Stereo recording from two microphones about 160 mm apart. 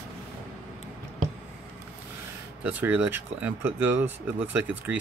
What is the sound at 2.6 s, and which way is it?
Speech, 10° right (ahead or behind).